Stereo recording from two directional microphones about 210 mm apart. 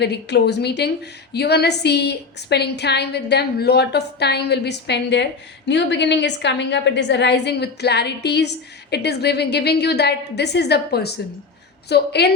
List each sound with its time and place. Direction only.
0.0 s a woman's voice: 55° left (ahead or behind)